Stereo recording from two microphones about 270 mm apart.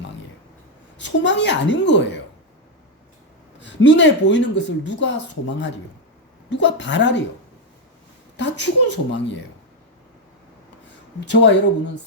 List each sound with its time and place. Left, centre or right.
0.9 s a woman's voice: left
3.6 s speech: left
8.4 s a woman's voice: left
10.8 s a sound: left